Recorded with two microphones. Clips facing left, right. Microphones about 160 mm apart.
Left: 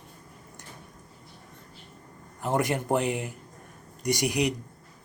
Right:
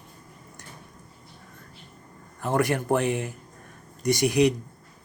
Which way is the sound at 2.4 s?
20° left (ahead or behind).